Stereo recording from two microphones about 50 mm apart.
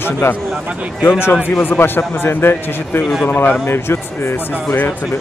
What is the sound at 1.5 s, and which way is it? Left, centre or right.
A man's voice, left.